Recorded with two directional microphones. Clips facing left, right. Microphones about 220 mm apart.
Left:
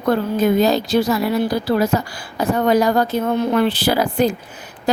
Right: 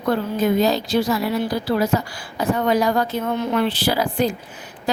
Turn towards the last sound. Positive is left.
turn(degrees=45)  # may be behind; listen again after turning